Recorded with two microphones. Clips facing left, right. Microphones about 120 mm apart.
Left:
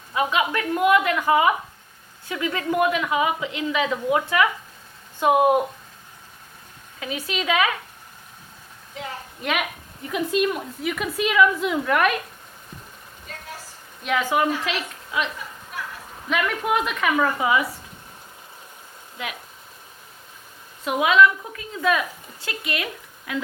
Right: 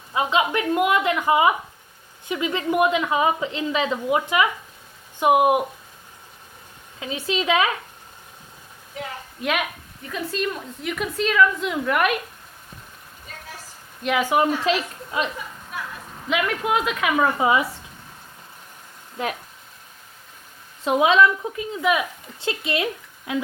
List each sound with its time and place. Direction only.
0.1 s a woman's voice: 25° right (ahead or behind)
4.1 s speech: 20° right (ahead or behind)
7.0 s a woman's voice: 25° right (ahead or behind)
9.4 s a woman's voice: centre (ahead or behind)
10.1 s a woman's voice: 15° left (ahead or behind)
10.8 s a woman's voice: centre (ahead or behind)
11.7 s a woman's voice: 5° right (ahead or behind)
14.0 s a woman's voice: 5° right (ahead or behind)
14.3 s speech: 25° right (ahead or behind)
16.6 s a woman's voice: centre (ahead or behind)
17.2 s a woman's voice: 25° right (ahead or behind)
19.1 s speech: 40° right (ahead or behind)
20.8 s a woman's voice: 30° right (ahead or behind)
22.4 s speech: 25° right (ahead or behind)